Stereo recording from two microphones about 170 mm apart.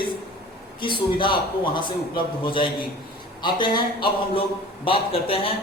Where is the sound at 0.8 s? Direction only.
30° left (ahead or behind).